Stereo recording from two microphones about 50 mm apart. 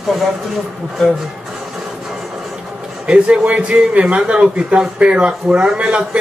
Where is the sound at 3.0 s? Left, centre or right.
Centre.